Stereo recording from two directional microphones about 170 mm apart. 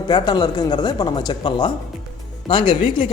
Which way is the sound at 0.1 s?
25° left (ahead or behind).